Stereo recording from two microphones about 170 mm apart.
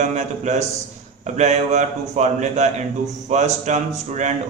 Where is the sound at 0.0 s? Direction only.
45° right (ahead or behind).